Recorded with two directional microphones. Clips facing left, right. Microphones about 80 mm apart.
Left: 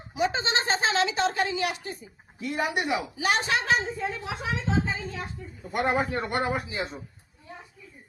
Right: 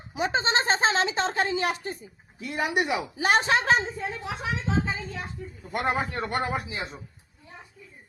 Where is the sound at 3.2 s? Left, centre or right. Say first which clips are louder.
Right 6 dB; right.